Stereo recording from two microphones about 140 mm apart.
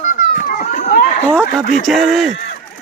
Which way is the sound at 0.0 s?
70° left (ahead or behind).